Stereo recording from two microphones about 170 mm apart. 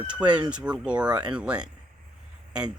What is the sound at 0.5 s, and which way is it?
Speech, 5° right (ahead or behind).